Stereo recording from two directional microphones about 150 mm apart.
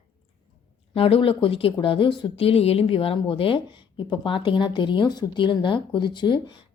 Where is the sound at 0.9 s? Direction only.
40° left (ahead or behind).